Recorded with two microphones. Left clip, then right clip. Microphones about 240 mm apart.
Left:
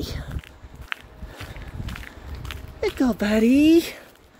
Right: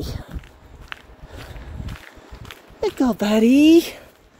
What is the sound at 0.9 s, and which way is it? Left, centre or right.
Walk, centre.